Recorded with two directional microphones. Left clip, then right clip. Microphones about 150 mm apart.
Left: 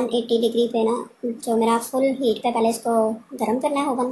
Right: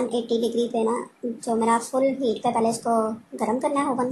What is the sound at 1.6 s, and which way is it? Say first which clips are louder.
Speech: left 1 dB; centre (ahead or behind).